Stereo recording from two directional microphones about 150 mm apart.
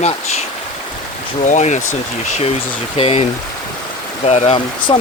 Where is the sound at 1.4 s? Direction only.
50° left (ahead or behind).